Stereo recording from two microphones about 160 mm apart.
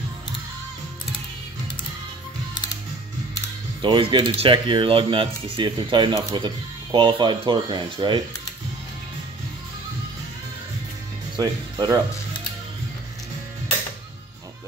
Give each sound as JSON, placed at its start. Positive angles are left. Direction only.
{"t": 3.8, "sound": "speech", "side_deg": -30}
{"t": 11.3, "sound": "speech", "side_deg": -25}